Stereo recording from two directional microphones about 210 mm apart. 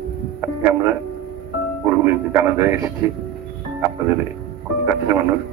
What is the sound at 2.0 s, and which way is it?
Speech, 10° right (ahead or behind).